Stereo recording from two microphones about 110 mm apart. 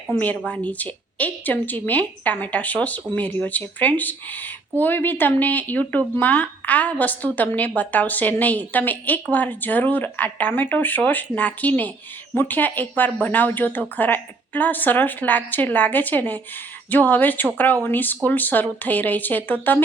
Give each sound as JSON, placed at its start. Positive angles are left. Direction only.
{"t": 0.1, "sound": "a woman's voice", "side_deg": 15}